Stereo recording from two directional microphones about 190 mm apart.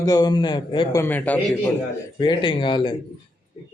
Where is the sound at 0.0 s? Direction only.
20° left (ahead or behind).